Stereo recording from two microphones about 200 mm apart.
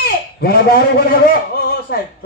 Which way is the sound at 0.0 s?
50° left (ahead or behind).